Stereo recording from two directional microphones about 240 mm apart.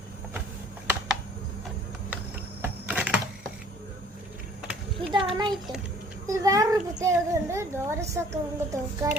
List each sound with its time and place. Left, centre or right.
2.6 s computer keyboard: centre
4.7 s a sound: centre
5.3 s a child's voice: centre